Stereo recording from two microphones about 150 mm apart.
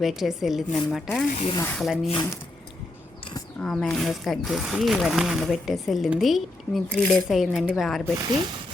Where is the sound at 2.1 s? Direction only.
25° left (ahead or behind).